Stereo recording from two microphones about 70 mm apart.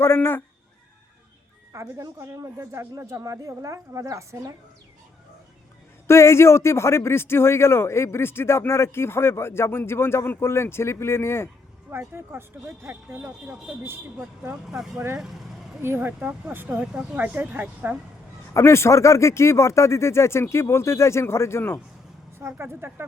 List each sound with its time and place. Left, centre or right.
0.0 s speech: left
1.7 s a woman's voice: right
6.1 s speech: left
11.9 s speech: right
13.5 s speech: centre
14.9 s speech: right
16.6 s speech: centre
17.2 s speech: right
18.5 s speech: left
22.4 s speech: right